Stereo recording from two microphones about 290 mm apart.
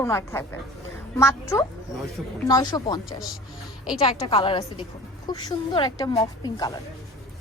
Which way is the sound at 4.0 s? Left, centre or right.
Centre.